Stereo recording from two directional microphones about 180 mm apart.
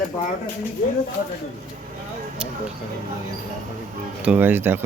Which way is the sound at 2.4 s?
5° right (ahead or behind).